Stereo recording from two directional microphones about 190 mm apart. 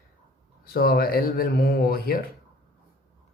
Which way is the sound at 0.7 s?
55° left (ahead or behind).